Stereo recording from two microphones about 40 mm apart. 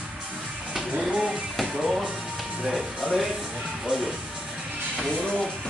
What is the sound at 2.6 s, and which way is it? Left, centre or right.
Speech, centre.